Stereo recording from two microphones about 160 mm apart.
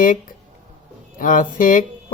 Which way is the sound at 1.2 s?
55° left (ahead or behind).